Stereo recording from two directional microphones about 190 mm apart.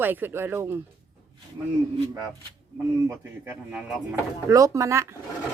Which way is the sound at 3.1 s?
10° right (ahead or behind).